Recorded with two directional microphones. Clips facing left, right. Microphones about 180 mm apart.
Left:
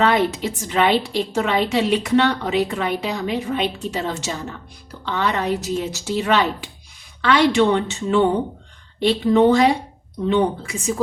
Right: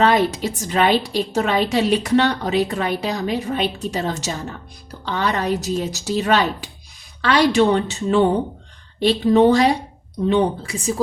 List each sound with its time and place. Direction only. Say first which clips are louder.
0.0 s a woman's voice: right 1 dB; 40° right (ahead or behind)